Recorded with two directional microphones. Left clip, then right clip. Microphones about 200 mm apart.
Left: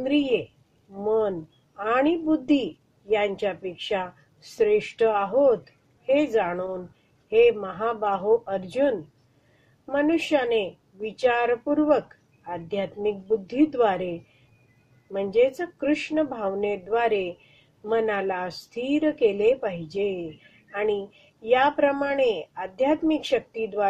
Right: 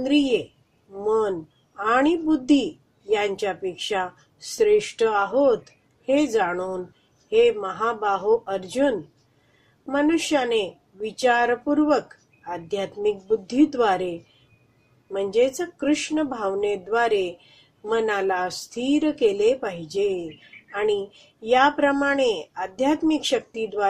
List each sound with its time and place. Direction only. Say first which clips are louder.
0.0 s a woman's voice: right 2 dB; 25° right (ahead or behind)
1.8 s a woman's voice: right 2 dB; 25° right (ahead or behind)
15.1 s a woman's voice: right 1 dB; 25° right (ahead or behind)
21.5 s a woman's voice: right 2 dB; 25° right (ahead or behind)